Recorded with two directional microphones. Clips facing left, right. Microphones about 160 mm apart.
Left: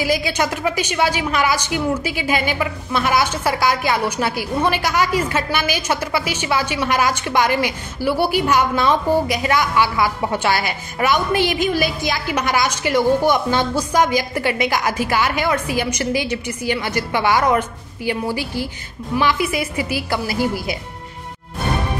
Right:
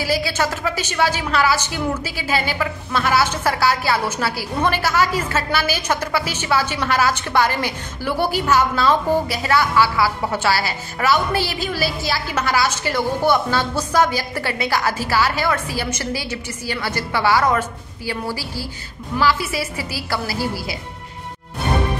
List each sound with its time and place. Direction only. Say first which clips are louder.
0.1 s a woman's voice: left 1 dB; 15° left (ahead or behind)